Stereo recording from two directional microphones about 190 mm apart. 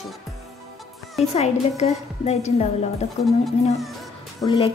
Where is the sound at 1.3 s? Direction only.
35° left (ahead or behind).